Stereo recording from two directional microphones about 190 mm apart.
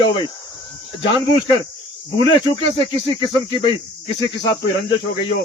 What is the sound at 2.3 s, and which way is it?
Speech, 25° left (ahead or behind).